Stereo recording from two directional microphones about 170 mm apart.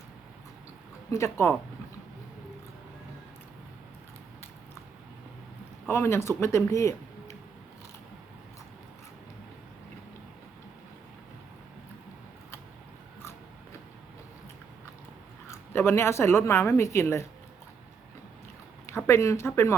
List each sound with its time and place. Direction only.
1.1 s speech: 15° left (ahead or behind)
5.9 s speech: 15° left (ahead or behind)
6.7 s a sound: 15° left (ahead or behind)
15.4 s a woman's voice: 15° left (ahead or behind)
19.0 s speech: 15° left (ahead or behind)